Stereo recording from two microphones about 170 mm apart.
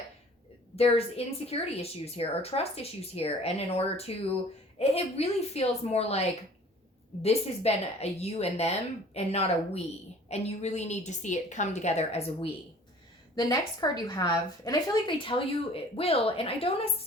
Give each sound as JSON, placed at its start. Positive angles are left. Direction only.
{"t": 0.8, "sound": "a woman's voice", "side_deg": 35}
{"t": 13.3, "sound": "a woman's voice", "side_deg": 25}